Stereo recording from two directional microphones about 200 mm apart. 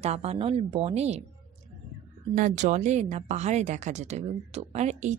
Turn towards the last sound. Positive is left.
turn(degrees=-35)  # may be behind; listen again after turning